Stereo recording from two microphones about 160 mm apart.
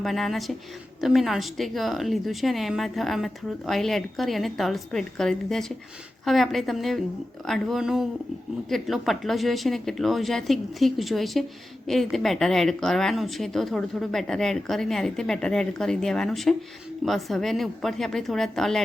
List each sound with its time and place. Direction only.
0.0 s a woman's voice: centre (ahead or behind)